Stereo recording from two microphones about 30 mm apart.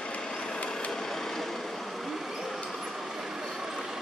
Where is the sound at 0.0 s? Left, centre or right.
Left; by 2.3 s centre.